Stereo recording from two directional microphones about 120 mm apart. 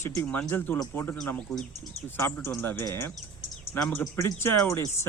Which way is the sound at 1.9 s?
20° left (ahead or behind).